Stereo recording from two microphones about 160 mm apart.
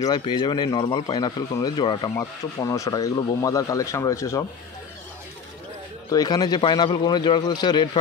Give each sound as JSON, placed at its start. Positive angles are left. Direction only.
{"t": 0.0, "sound": "speech", "side_deg": 25}
{"t": 6.0, "sound": "speech", "side_deg": 25}